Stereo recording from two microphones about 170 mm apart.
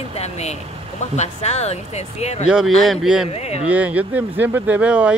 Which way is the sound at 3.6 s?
10° right (ahead or behind).